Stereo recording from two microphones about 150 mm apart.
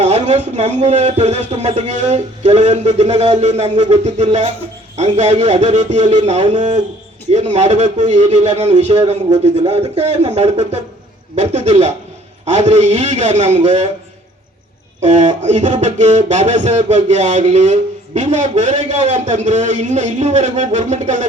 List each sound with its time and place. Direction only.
0.0 s a man's voice: 50° right (ahead or behind)
8.7 s a man's voice: 35° right (ahead or behind); by 13.6 s 50° right (ahead or behind)
15.0 s a man's voice: 50° right (ahead or behind)